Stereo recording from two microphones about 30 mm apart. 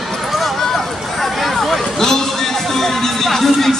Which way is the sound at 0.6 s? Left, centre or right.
Centre.